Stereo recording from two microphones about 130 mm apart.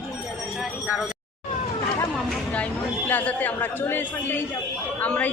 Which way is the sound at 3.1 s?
15° left (ahead or behind).